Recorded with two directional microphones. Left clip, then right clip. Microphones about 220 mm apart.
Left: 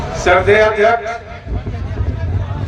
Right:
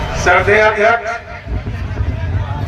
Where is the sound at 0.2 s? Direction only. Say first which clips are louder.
Even; 35° left (ahead or behind).